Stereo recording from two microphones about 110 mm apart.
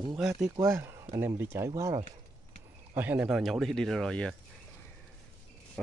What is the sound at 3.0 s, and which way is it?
Speech, 15° right (ahead or behind).